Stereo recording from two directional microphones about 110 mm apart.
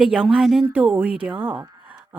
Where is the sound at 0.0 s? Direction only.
5° right (ahead or behind).